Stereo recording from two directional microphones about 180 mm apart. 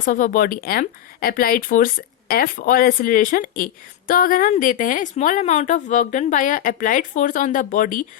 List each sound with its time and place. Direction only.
0.0 s speech: 45° left (ahead or behind)